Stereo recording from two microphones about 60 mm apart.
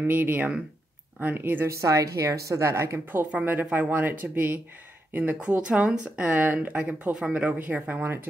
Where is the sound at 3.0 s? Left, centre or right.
Right.